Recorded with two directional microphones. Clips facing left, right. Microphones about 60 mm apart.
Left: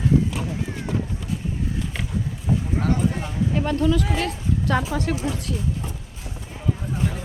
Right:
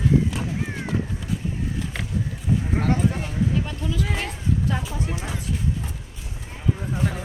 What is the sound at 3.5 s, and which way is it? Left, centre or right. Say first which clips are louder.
Speech: left 6 dB; left.